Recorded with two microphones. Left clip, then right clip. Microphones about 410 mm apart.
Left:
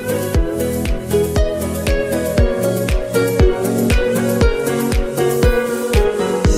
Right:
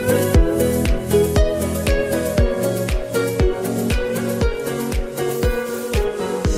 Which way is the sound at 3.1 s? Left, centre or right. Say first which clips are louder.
Left 5 dB; left.